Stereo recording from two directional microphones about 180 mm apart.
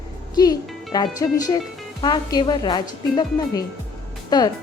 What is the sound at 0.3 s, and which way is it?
A woman's voice, 20° left (ahead or behind).